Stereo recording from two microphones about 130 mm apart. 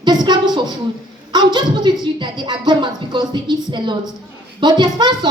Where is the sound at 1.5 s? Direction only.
35° right (ahead or behind).